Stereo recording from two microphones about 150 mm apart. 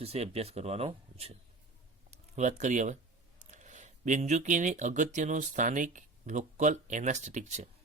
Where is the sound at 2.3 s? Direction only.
55° right (ahead or behind).